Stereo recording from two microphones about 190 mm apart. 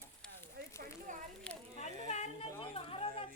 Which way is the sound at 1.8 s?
35° left (ahead or behind).